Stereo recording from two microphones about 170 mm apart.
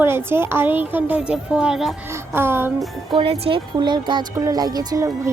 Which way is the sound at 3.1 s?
30° right (ahead or behind).